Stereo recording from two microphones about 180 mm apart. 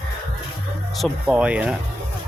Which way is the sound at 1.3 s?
5° right (ahead or behind).